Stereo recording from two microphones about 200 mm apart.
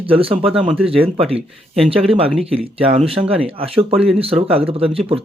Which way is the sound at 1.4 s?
Centre (ahead or behind).